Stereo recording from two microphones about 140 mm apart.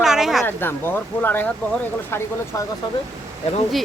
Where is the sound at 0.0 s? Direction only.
5° right (ahead or behind).